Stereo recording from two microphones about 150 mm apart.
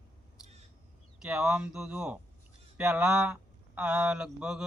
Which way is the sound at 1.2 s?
5° right (ahead or behind).